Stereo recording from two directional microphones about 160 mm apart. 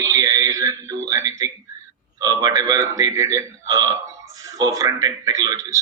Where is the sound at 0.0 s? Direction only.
20° right (ahead or behind).